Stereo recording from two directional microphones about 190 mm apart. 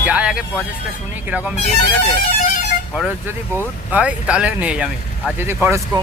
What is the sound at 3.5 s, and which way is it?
Speech, 10° right (ahead or behind).